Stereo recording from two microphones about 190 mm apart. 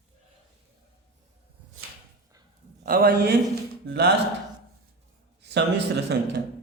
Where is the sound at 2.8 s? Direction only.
50° right (ahead or behind).